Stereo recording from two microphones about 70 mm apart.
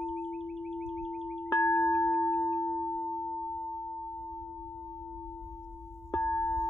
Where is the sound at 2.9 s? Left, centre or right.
Centre.